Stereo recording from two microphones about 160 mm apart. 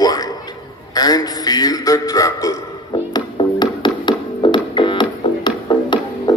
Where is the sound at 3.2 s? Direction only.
25° left (ahead or behind).